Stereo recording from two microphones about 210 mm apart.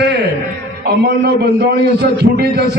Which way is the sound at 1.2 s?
50° right (ahead or behind).